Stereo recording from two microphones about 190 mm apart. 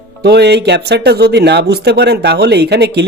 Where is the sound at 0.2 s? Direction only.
60° right (ahead or behind).